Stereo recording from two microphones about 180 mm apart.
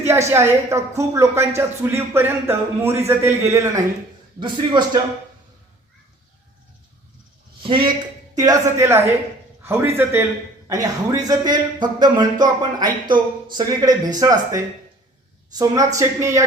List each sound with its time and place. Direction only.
0.0 s a woman's voice: 15° right (ahead or behind)
4.4 s speech: 25° right (ahead or behind)
7.6 s a man's voice: 25° right (ahead or behind)
8.4 s a woman's voice: 15° right (ahead or behind)